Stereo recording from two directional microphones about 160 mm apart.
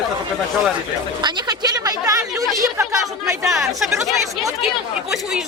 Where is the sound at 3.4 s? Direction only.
Centre (ahead or behind).